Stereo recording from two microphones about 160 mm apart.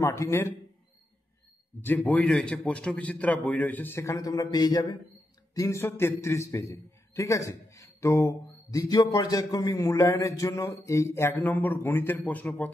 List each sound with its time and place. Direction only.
0.0 s a man's voice: 15° left (ahead or behind)
1.8 s a man's voice: 10° left (ahead or behind)